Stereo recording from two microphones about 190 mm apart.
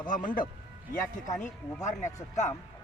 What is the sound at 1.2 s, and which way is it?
Speech, 40° left (ahead or behind).